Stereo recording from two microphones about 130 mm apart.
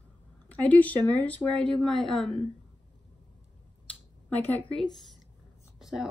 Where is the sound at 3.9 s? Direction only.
15° left (ahead or behind).